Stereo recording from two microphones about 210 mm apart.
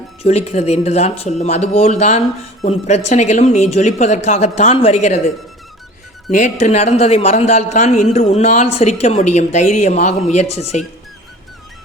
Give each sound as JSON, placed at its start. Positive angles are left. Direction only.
{"t": 0.2, "sound": "speech", "side_deg": 30}
{"t": 6.3, "sound": "speech", "side_deg": 35}